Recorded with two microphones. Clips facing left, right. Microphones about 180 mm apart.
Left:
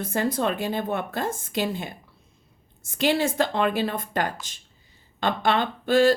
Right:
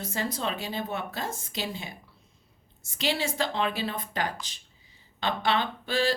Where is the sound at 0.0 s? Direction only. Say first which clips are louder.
Left 7 dB; 55° left (ahead or behind).